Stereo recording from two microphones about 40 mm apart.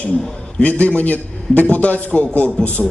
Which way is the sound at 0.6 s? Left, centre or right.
Left.